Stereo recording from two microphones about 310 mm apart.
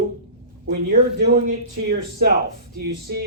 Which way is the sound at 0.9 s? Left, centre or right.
Right.